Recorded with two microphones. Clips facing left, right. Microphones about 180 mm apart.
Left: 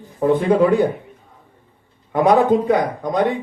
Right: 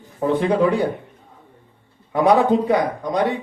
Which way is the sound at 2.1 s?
50° left (ahead or behind).